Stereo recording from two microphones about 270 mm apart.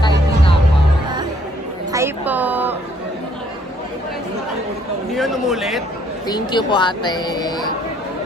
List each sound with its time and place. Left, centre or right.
1.9 s a sound: centre
5.1 s a man's voice: centre
6.2 s speech: centre